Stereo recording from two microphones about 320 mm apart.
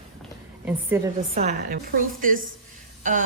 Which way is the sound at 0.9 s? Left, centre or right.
Centre.